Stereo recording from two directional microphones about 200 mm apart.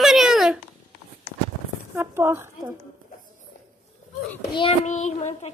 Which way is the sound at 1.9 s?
10° right (ahead or behind).